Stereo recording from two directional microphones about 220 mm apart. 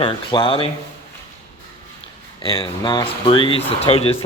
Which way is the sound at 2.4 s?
20° left (ahead or behind).